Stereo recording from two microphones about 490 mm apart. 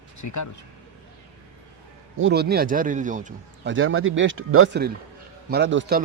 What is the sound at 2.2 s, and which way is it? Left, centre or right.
A man's voice, right.